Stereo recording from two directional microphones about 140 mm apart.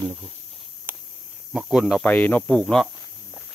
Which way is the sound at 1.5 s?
Centre (ahead or behind).